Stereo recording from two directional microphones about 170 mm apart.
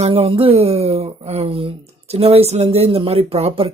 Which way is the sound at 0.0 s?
35° right (ahead or behind).